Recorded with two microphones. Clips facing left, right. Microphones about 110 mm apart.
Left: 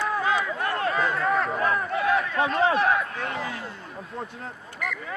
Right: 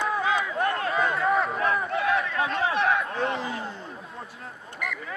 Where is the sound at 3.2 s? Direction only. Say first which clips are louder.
Right 3 dB; 30° right (ahead or behind).